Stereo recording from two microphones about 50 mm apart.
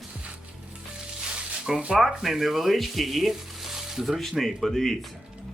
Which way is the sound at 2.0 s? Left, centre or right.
Centre.